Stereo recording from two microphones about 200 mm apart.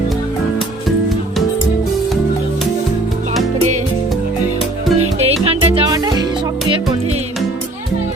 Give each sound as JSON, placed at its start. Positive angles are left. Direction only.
{"t": 4.9, "sound": "music", "side_deg": -30}
{"t": 5.9, "sound": "music", "side_deg": -20}